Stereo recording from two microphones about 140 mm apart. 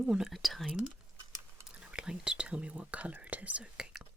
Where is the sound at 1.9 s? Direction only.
5° right (ahead or behind).